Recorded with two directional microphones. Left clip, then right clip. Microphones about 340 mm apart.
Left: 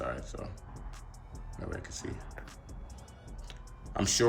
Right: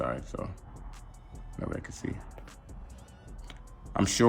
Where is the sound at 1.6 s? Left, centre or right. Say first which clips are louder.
Right 4 dB; centre.